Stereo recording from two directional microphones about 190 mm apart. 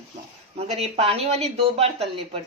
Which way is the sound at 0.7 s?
30° right (ahead or behind).